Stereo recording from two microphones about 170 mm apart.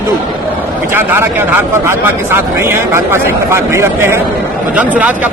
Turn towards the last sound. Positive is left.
turn(degrees=-10)  # may be behind; listen again after turning